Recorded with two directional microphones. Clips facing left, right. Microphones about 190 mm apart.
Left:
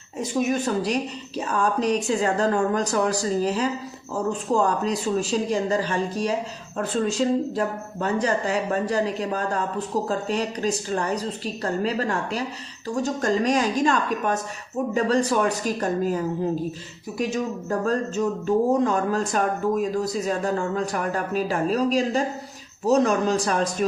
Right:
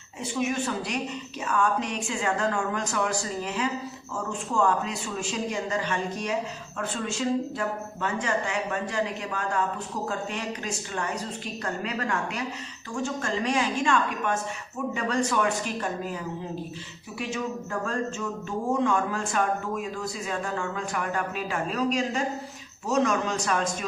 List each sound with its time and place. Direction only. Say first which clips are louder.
0.2 s speech: left 4 dB; 40° left (ahead or behind)